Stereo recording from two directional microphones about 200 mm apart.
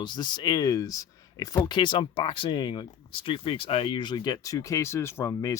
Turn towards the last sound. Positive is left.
turn(degrees=15)  # may be behind; listen again after turning